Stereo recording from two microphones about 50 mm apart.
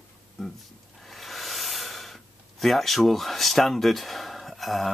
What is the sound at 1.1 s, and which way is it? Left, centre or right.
Snort, centre.